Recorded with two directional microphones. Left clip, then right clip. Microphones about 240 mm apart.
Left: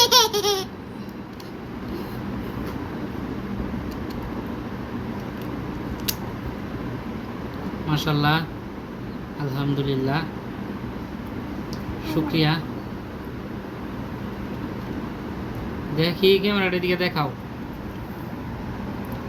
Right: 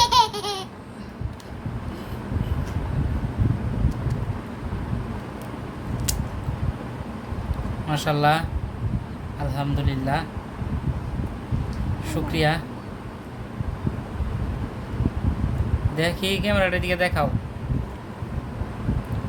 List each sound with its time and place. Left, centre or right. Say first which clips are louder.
0.0 s baby laughter: left 1 dB; centre
7.9 s speech: right 2 dB; right
9.6 s speech: left 5 dB; right
12.0 s a woman's voice: even; right
16.0 s speech: left 5 dB; right